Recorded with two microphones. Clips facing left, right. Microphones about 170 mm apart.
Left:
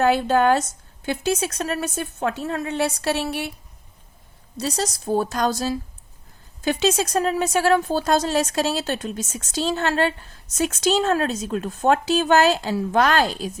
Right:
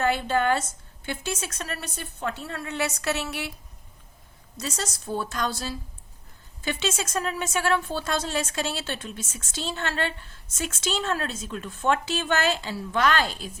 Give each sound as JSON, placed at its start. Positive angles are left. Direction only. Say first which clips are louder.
{"t": 0.0, "sound": "speech", "louder": "left 6 dB", "side_deg": 40}
{"t": 2.7, "sound": "speech", "louder": "left 3 dB", "side_deg": 30}
{"t": 4.5, "sound": "speech", "louder": "left 7 dB", "side_deg": 35}